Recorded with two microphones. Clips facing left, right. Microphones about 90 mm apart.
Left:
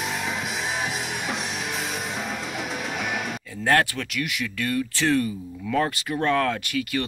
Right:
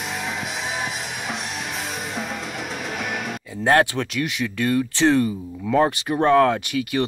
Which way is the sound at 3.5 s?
20° right (ahead or behind).